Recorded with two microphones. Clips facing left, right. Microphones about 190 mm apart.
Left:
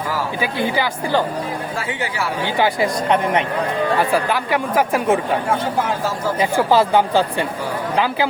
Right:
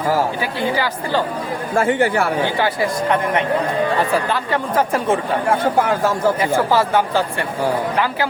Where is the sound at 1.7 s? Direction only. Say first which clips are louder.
Right 9 dB; 50° right (ahead or behind).